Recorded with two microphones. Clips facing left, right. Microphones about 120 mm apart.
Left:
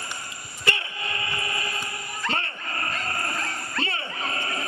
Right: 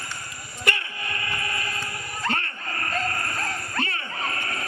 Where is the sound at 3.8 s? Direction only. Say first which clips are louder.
Even; 20° left (ahead or behind).